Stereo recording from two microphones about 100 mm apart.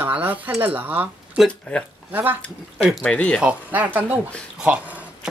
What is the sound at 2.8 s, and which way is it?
Speech, 5° left (ahead or behind).